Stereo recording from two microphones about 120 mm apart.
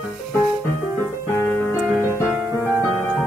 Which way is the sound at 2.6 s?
20° left (ahead or behind).